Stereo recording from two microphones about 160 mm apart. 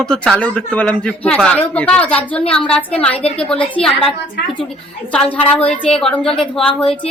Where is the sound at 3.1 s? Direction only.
40° left (ahead or behind).